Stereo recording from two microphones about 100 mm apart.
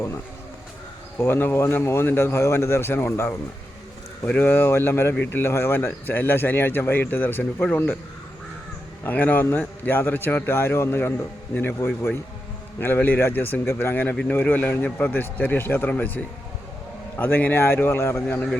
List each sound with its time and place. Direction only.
1.2 s speech: 20° left (ahead or behind)
9.0 s a man's voice: 15° left (ahead or behind)